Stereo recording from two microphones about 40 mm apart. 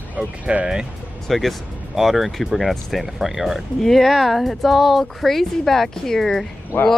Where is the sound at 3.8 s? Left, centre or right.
Centre.